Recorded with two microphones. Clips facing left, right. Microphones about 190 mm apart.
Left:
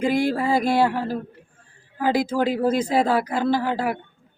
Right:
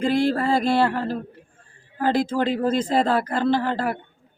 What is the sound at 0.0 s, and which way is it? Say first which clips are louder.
Speech: right 1 dB; 15° left (ahead or behind).